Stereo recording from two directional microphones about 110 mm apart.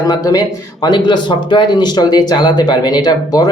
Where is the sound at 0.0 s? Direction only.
35° left (ahead or behind).